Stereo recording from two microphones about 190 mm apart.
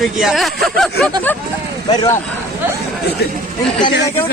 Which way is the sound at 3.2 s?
60° left (ahead or behind).